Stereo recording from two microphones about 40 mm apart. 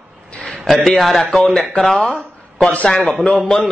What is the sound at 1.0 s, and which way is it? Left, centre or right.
Speech, centre.